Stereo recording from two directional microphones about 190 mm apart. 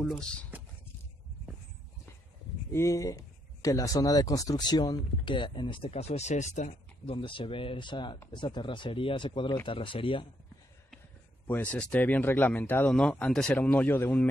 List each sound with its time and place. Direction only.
0.0 s speech: 5° left (ahead or behind)
2.7 s speech: 15° left (ahead or behind); by 7.2 s 40° left (ahead or behind)
7.2 s speech: 25° left (ahead or behind)
11.4 s speech: 10° left (ahead or behind)